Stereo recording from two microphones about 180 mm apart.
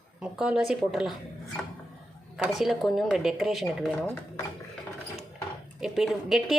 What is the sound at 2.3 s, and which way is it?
Speech, centre (ahead or behind).